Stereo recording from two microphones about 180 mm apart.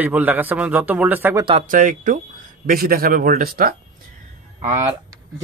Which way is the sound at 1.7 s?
50° right (ahead or behind).